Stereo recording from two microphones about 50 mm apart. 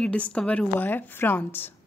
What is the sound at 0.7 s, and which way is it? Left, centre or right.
Speech, left.